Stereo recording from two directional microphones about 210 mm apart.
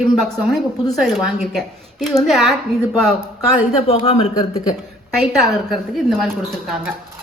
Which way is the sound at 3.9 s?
30° left (ahead or behind).